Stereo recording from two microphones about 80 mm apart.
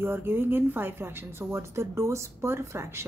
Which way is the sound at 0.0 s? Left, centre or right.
Right.